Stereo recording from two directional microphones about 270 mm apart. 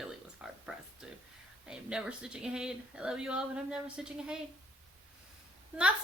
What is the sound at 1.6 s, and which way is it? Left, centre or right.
Speech, centre.